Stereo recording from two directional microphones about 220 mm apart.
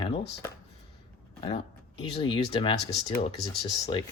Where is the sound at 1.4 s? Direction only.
20° left (ahead or behind).